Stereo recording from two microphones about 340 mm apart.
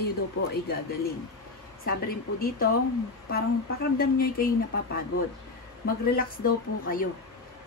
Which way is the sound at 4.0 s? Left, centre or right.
Left.